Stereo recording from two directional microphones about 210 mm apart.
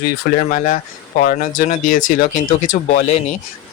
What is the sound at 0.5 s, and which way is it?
Speech, 40° left (ahead or behind).